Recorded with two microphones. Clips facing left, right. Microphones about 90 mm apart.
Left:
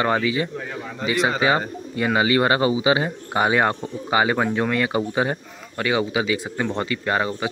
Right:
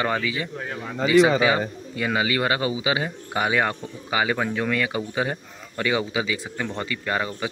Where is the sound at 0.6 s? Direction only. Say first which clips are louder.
Even; 5° right (ahead or behind).